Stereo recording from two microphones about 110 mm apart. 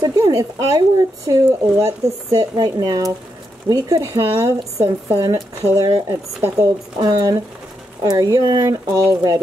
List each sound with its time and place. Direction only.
0.0 s speech: 35° right (ahead or behind)